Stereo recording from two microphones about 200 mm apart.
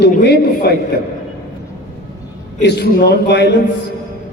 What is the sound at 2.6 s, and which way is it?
Speech, 55° left (ahead or behind).